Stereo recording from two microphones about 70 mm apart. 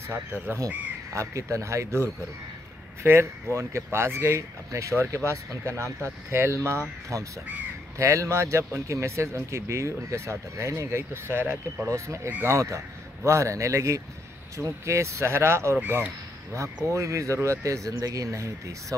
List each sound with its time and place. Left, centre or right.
0.1 s speech: right
1.1 s speech: right
8.0 s speech: right
11.9 s speech: right
15.8 s speech: right
16.9 s speech: right